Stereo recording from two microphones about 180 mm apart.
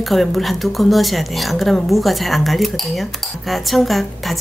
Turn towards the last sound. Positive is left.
turn(degrees=0)  # may be behind; listen again after turning